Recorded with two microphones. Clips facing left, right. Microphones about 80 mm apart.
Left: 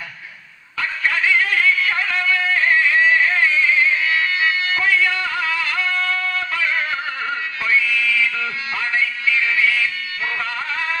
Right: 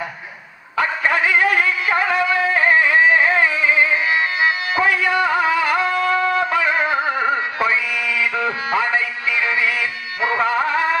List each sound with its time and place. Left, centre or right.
0.8 s music: right